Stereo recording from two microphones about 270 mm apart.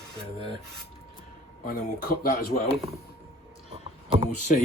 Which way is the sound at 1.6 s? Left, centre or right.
Left.